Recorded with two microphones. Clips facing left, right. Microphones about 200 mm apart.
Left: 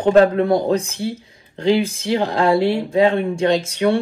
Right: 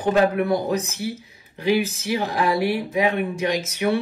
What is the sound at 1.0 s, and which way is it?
Speech, 25° left (ahead or behind).